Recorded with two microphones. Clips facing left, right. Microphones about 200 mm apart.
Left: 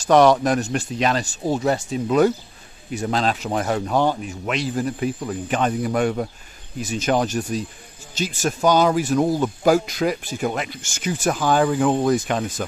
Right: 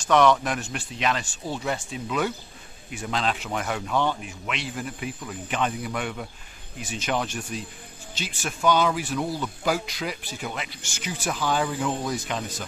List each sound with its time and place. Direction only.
0.0 s speech: 35° left (ahead or behind); by 12.6 s 50° left (ahead or behind)